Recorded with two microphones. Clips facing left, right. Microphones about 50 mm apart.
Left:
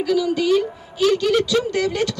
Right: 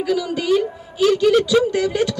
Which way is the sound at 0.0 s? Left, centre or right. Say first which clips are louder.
Left 2 dB; centre.